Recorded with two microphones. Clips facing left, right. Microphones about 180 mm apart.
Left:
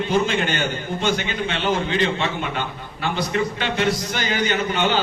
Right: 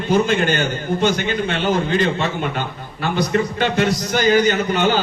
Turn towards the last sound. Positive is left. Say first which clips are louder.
# right 3 dB
turn(degrees=-40)  # may be behind; listen again after turning